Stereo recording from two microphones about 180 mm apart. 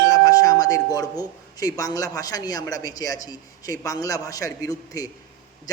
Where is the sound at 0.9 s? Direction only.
20° left (ahead or behind).